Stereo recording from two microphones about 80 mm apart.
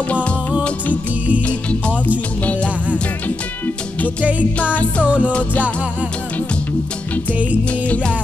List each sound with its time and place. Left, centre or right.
0.1 s music: centre
3.3 s music: left
4.2 s music: centre
7.8 s music: centre